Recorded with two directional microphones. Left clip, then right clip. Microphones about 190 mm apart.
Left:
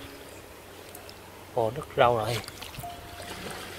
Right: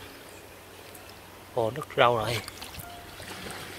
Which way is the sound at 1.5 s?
5° right (ahead or behind).